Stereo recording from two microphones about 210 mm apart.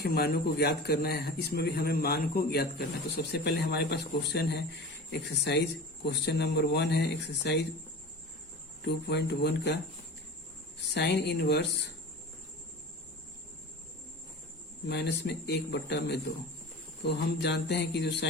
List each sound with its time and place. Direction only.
0.0 s a man's voice: 50° left (ahead or behind)
8.8 s a man's voice: 55° left (ahead or behind)
10.9 s a man's voice: 55° left (ahead or behind)
14.8 s a man's voice: 55° left (ahead or behind)